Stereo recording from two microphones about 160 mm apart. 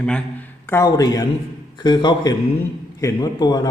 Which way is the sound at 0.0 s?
10° left (ahead or behind).